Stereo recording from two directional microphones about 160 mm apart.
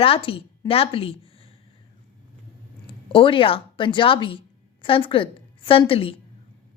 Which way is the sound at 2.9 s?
35° left (ahead or behind).